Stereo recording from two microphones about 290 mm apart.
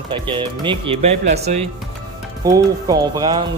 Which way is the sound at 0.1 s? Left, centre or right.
Centre.